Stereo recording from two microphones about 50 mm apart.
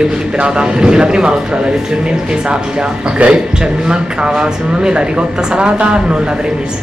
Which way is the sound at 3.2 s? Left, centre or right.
Right.